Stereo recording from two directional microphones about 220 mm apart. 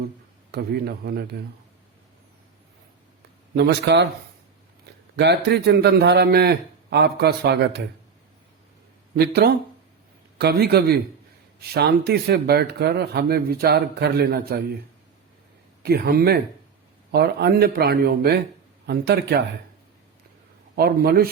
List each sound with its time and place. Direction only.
0.5 s speech: 45° right (ahead or behind)
3.5 s speech: 50° right (ahead or behind)
5.1 s speech: 50° right (ahead or behind)
9.1 s speech: 45° right (ahead or behind)
15.8 s speech: 45° right (ahead or behind)
20.7 s speech: 45° right (ahead or behind)